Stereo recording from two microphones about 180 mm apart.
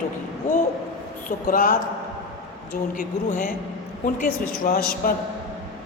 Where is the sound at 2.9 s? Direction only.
45° left (ahead or behind).